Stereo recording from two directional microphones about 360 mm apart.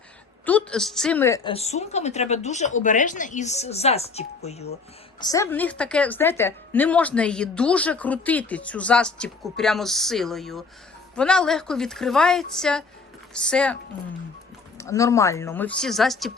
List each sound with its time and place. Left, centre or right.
0.4 s a woman's voice: centre
14.8 s a woman's voice: centre